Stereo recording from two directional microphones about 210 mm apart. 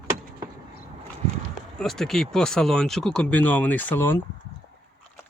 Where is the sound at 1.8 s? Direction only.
Centre (ahead or behind).